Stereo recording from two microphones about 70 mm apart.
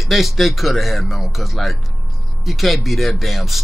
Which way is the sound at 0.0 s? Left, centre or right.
Centre.